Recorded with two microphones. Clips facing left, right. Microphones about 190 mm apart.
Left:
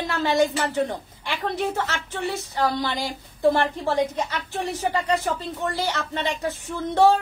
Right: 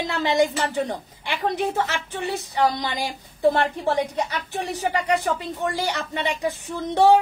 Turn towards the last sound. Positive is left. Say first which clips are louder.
# even
turn(degrees=-15)  # may be behind; listen again after turning